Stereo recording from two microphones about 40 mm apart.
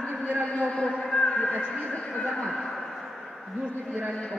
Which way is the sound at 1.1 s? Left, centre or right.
Left.